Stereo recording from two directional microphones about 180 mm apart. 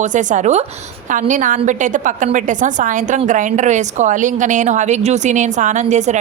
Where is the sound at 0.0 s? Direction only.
45° right (ahead or behind).